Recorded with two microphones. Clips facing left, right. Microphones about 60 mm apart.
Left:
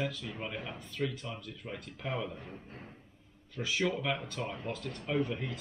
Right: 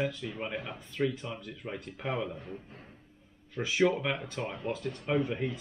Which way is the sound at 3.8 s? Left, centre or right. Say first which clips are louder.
Right 6 dB; centre.